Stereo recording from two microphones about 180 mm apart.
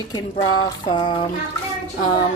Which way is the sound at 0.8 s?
25° left (ahead or behind).